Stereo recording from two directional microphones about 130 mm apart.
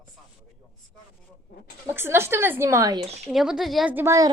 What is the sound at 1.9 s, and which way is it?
A woman's voice, 20° right (ahead or behind).